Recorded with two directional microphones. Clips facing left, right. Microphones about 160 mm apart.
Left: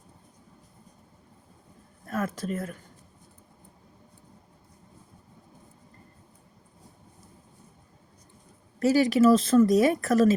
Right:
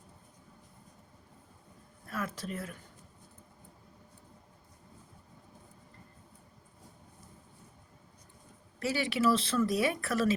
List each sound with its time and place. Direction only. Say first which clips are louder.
2.0 s speech: left 7 dB; 45° left (ahead or behind)
8.8 s speech: left 10 dB; 40° left (ahead or behind)